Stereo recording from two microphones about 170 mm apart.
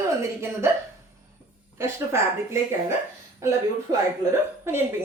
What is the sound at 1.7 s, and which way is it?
A woman's voice, 15° right (ahead or behind).